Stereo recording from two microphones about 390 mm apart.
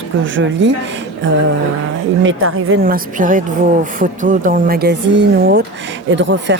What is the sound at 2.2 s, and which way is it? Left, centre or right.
A woman's voice, right.